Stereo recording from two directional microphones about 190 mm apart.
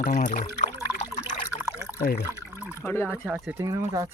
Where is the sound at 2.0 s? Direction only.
55° left (ahead or behind).